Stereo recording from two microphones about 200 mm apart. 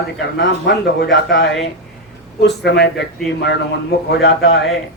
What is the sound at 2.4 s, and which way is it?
Speech, 55° left (ahead or behind).